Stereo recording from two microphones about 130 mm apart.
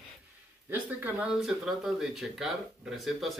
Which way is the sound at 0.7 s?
15° right (ahead or behind).